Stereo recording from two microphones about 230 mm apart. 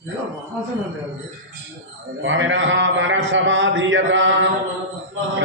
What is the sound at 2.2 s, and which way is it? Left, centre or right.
A man's voice, right.